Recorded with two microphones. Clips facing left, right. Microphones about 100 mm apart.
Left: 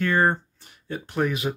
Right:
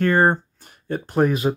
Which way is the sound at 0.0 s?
45° right (ahead or behind).